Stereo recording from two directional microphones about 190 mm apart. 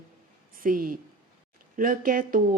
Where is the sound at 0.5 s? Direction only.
50° right (ahead or behind).